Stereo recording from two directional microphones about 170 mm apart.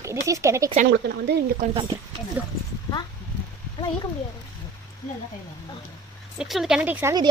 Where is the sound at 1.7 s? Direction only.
30° right (ahead or behind).